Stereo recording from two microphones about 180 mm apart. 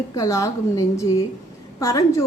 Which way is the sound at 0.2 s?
20° left (ahead or behind).